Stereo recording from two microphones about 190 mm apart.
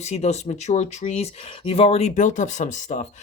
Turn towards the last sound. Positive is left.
turn(degrees=40)  # may be behind; listen again after turning